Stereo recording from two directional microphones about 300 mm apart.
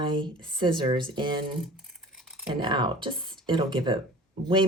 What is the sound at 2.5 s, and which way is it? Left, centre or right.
Speech, centre.